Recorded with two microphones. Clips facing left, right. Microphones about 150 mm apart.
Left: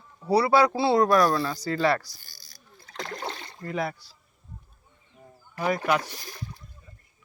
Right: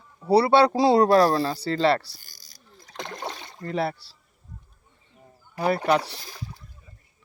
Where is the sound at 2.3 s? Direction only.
15° right (ahead or behind).